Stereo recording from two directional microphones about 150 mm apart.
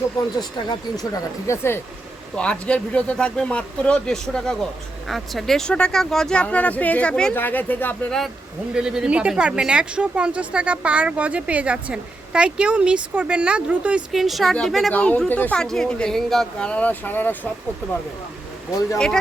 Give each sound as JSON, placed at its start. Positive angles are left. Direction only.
{"t": 0.2, "sound": "speech", "side_deg": 25}
{"t": 2.3, "sound": "speech", "side_deg": 5}
{"t": 8.7, "sound": "speech", "side_deg": -5}
{"t": 18.9, "sound": "speech", "side_deg": 5}